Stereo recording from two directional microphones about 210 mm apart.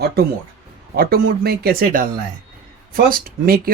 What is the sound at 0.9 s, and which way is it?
Speech, 45° right (ahead or behind).